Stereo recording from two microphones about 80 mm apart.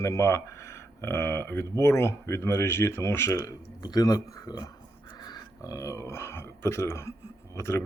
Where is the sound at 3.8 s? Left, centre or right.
Left.